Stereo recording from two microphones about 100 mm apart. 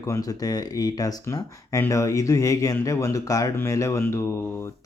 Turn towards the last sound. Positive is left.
turn(degrees=30)  # may be behind; listen again after turning